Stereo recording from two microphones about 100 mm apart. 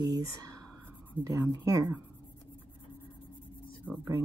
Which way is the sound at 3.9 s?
15° right (ahead or behind).